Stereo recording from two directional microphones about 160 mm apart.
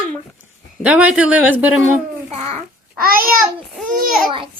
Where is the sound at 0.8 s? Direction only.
10° right (ahead or behind).